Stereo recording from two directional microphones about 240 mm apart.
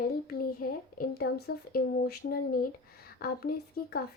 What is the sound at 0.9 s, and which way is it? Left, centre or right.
A woman's voice, left.